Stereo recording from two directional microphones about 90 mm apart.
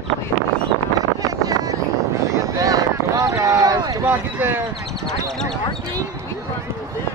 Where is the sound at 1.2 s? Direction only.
45° right (ahead or behind).